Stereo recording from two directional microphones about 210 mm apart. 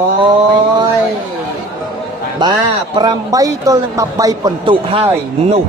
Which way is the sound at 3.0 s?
20° right (ahead or behind).